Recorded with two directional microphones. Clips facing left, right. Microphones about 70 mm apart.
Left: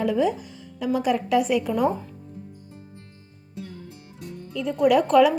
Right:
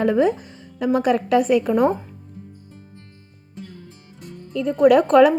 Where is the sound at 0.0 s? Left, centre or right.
Right.